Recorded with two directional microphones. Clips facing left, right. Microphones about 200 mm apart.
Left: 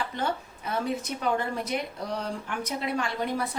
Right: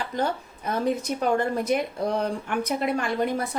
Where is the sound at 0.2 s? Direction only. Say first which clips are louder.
Right 3 dB; 40° right (ahead or behind).